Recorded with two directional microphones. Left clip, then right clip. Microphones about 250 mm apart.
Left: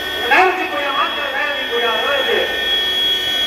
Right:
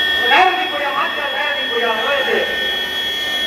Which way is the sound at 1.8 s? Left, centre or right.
Centre.